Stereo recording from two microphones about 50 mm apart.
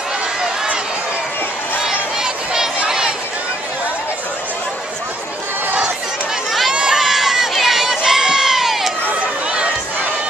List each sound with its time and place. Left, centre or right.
1.9 s a sound: centre
6.7 s crowd: centre
7.0 s crowd: centre